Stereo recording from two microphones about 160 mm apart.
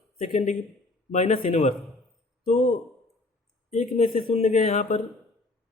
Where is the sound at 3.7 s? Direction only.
50° left (ahead or behind).